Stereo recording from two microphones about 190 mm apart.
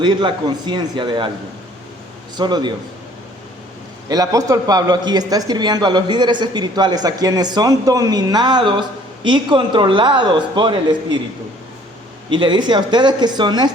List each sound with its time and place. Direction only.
0.0 s a man's voice: 25° right (ahead or behind)
2.3 s a man's voice: 20° right (ahead or behind)
4.1 s a man's voice: 20° right (ahead or behind)
12.3 s a man's voice: 25° right (ahead or behind)